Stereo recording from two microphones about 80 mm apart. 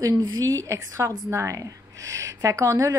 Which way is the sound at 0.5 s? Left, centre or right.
Right.